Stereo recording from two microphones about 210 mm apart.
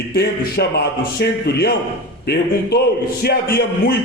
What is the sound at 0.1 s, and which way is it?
A man's voice, 50° left (ahead or behind).